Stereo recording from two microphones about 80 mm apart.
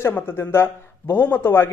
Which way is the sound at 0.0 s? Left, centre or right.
Left.